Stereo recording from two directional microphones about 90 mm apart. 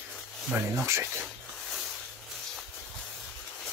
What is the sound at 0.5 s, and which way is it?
Speech, 25° right (ahead or behind).